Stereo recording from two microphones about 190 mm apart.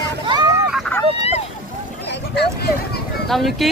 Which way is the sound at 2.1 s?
60° left (ahead or behind).